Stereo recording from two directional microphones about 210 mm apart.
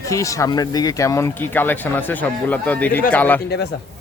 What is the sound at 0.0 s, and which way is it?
Speech, 15° left (ahead or behind).